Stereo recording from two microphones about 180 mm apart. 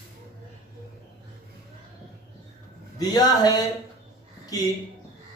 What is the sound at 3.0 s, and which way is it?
Speech, 20° left (ahead or behind).